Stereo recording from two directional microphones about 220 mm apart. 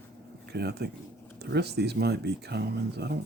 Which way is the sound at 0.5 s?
50° right (ahead or behind).